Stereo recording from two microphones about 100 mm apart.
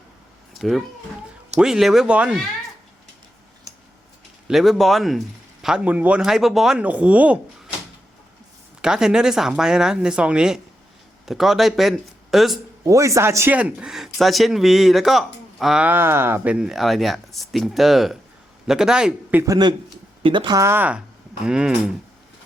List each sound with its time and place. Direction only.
0.6 s speech: centre (ahead or behind)
4.4 s speech: centre (ahead or behind)
5.6 s speech: 10° right (ahead or behind)
8.8 s speech: 5° right (ahead or behind)
12.8 s a man's voice: 30° right (ahead or behind)
13.6 s speech: 10° right (ahead or behind)
15.8 s speech: 20° right (ahead or behind)
20.2 s speech: 50° right (ahead or behind)
20.6 s a man's voice: 25° right (ahead or behind)